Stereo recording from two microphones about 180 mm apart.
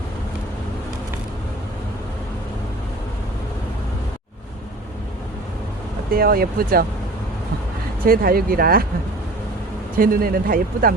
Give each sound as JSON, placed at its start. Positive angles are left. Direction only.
{"t": 6.1, "sound": "speech", "side_deg": -55}
{"t": 8.0, "sound": "speech", "side_deg": -55}
{"t": 10.0, "sound": "speech", "side_deg": -55}